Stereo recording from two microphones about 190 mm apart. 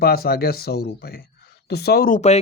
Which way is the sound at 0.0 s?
55° left (ahead or behind).